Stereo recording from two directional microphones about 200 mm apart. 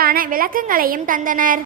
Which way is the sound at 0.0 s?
45° right (ahead or behind).